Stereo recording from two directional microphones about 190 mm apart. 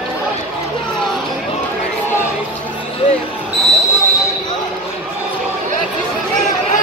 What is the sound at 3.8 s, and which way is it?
Train, 15° left (ahead or behind).